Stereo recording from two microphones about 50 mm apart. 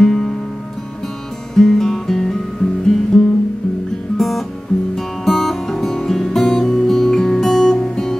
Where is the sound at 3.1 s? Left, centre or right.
Centre.